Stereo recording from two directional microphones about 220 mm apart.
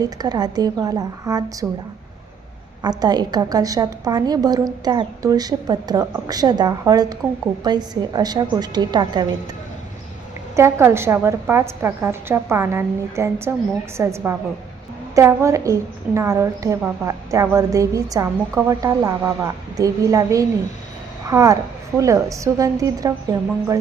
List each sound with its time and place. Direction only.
0.0 s a woman's voice: 15° right (ahead or behind)
2.8 s a woman's voice: 20° right (ahead or behind)
10.5 s a woman's voice: 10° right (ahead or behind)